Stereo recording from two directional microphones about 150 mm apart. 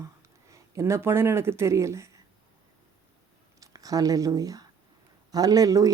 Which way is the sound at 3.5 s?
25° right (ahead or behind).